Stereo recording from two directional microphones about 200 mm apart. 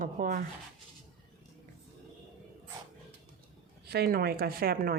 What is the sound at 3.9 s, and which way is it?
Speech, 50° right (ahead or behind).